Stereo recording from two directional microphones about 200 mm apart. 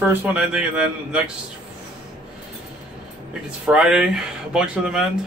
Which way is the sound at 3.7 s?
5° right (ahead or behind).